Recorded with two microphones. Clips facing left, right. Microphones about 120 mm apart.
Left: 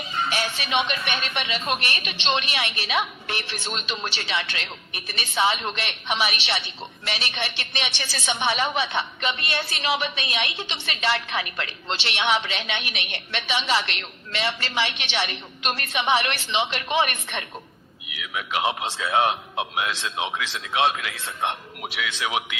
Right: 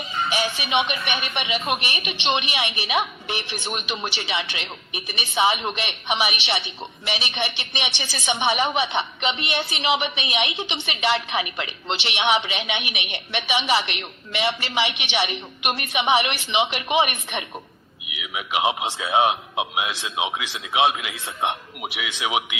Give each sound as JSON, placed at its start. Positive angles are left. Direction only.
{"t": 0.3, "sound": "a woman's voice", "side_deg": -15}